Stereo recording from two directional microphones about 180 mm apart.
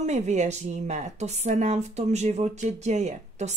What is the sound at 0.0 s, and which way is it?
A woman's voice, 40° right (ahead or behind).